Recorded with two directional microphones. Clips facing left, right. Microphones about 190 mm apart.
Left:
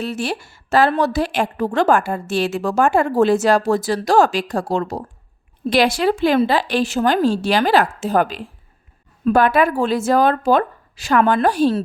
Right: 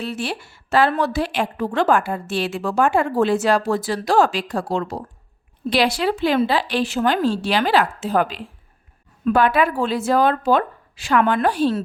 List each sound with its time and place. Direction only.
0.0 s a woman's voice: 45° left (ahead or behind)